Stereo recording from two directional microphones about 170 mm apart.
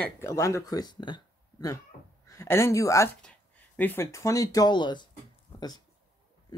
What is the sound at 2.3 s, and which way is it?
Speech, 15° left (ahead or behind).